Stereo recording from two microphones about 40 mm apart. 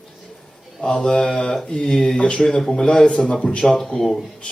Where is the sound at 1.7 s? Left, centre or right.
Left.